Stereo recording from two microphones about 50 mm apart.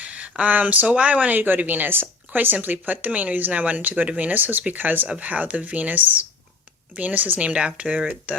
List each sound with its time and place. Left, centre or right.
0.0 s speech: right
7.4 s speech: right